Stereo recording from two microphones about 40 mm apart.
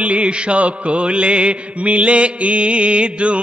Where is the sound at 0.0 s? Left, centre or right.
Right.